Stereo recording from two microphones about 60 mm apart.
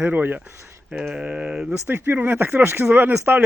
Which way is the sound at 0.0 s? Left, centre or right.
Right.